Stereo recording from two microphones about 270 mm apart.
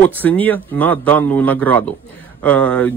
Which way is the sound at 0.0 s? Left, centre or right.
Centre.